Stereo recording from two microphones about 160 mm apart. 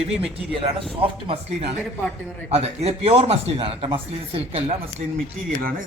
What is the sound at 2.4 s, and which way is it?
Speech, 40° right (ahead or behind).